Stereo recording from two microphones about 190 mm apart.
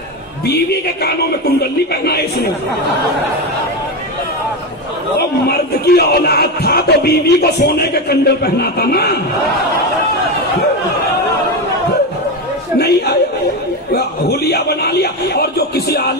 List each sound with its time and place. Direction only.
0.5 s speech: 55° left (ahead or behind)
5.5 s speech: 55° left (ahead or behind)
12.7 s speech: 60° left (ahead or behind)